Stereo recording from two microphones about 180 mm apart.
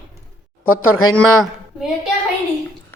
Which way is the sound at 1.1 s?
Centre (ahead or behind).